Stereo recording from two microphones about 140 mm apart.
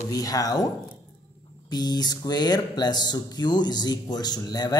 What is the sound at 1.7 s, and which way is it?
Speech, 30° left (ahead or behind).